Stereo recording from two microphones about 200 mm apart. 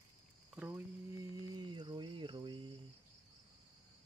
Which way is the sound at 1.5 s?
25° right (ahead or behind).